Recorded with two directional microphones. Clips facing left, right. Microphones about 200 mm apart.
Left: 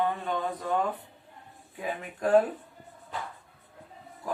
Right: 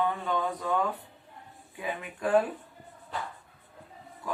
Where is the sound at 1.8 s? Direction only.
40° left (ahead or behind).